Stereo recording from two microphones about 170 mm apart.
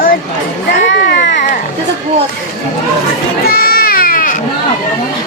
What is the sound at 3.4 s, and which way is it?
Baby cry, 60° left (ahead or behind).